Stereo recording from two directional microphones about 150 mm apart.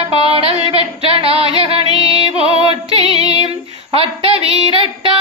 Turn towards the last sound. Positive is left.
turn(degrees=-35)  # may be behind; listen again after turning